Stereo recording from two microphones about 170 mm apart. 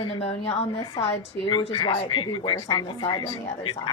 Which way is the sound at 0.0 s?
35° left (ahead or behind).